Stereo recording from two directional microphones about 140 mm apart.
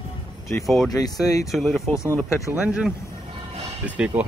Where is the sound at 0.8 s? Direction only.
25° left (ahead or behind).